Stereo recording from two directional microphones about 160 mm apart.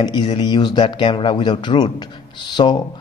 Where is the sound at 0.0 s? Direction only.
30° left (ahead or behind).